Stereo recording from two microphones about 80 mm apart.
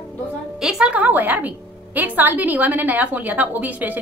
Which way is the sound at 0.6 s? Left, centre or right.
Centre.